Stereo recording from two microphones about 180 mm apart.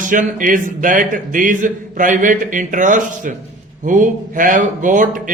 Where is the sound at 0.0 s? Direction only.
45° right (ahead or behind).